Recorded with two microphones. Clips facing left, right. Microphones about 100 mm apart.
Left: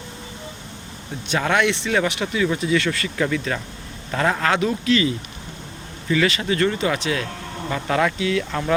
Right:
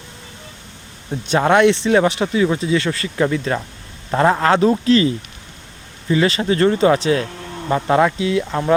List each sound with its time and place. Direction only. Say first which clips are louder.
1.3 s speech: right 7 dB; 30° right (ahead or behind)